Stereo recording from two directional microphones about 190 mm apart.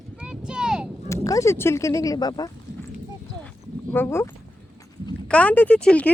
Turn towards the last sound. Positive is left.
turn(degrees=5)  # may be behind; listen again after turning